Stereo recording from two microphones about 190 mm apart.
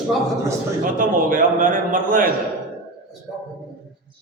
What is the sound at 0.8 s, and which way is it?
A man's voice, 45° right (ahead or behind).